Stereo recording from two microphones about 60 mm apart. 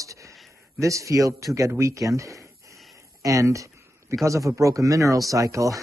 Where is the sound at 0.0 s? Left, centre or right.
Right.